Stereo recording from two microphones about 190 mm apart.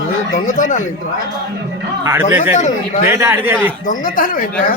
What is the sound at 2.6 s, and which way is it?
Speech, 40° left (ahead or behind).